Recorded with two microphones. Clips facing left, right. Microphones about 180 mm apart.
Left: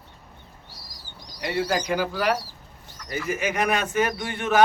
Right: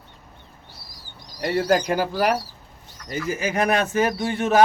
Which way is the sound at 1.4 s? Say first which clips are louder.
Right 5 dB; 45° right (ahead or behind).